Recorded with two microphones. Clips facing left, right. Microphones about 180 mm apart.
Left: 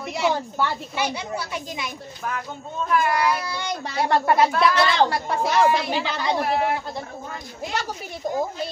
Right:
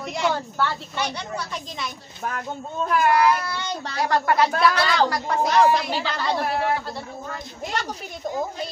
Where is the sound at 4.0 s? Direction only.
25° left (ahead or behind).